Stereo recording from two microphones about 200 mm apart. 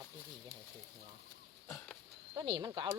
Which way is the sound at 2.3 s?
20° right (ahead or behind).